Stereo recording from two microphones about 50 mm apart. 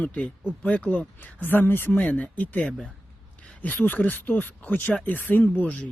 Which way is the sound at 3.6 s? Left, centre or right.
Left.